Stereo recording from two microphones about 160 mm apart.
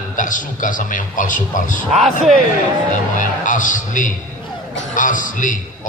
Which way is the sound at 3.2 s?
55° left (ahead or behind).